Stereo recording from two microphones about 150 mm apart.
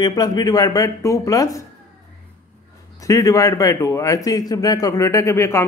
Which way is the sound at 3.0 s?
20° left (ahead or behind).